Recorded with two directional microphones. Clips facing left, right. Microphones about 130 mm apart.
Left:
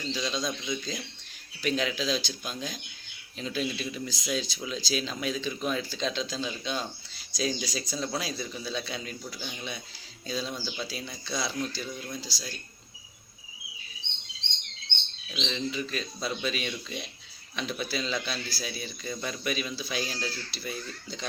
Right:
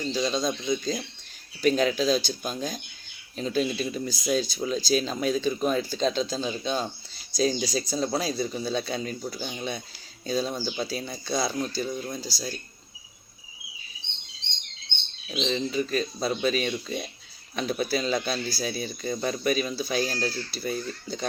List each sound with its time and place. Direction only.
0.0 s speech: 40° right (ahead or behind)
15.3 s speech: 40° right (ahead or behind)